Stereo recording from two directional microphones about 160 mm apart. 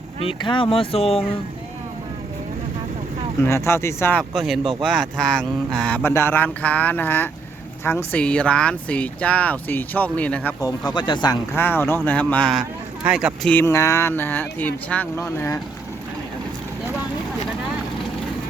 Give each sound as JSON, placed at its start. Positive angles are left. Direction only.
{"t": 0.2, "sound": "speech", "side_deg": 35}
{"t": 3.4, "sound": "speech", "side_deg": 15}
{"t": 4.2, "sound": "speech", "side_deg": 0}
{"t": 10.6, "sound": "speech", "side_deg": 25}
{"t": 11.5, "sound": "speech", "side_deg": 15}
{"t": 13.5, "sound": "speech", "side_deg": 15}